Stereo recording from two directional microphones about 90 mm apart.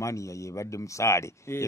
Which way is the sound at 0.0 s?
35° left (ahead or behind).